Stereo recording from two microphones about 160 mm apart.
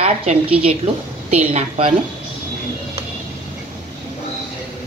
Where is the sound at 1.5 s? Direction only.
40° right (ahead or behind).